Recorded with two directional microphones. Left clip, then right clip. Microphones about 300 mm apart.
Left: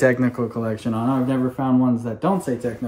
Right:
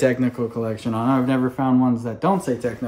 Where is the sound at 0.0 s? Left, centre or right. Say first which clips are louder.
Left 2 dB; centre.